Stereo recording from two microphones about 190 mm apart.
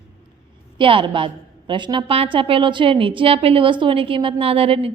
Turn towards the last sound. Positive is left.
turn(degrees=-30)  # may be behind; listen again after turning